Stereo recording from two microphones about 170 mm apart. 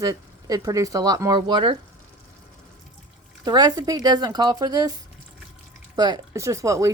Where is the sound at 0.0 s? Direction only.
20° right (ahead or behind).